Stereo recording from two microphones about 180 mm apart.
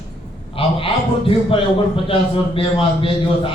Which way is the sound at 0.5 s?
30° left (ahead or behind).